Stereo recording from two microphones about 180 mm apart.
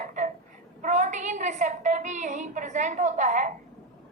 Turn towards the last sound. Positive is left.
turn(degrees=-45)  # may be behind; listen again after turning